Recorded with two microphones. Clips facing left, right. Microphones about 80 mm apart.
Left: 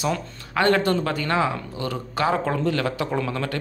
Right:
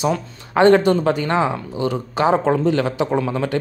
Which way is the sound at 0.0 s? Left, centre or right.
Right.